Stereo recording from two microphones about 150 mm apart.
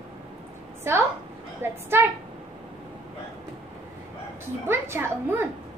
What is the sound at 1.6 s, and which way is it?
Speech, 15° right (ahead or behind).